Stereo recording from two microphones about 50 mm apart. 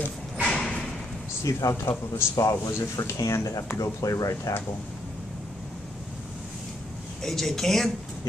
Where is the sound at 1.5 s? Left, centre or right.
Left.